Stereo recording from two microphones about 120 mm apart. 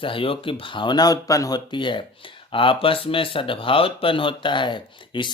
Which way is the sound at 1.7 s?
40° left (ahead or behind).